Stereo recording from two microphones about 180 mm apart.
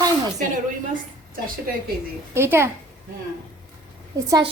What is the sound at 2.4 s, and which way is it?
Speech, 15° right (ahead or behind).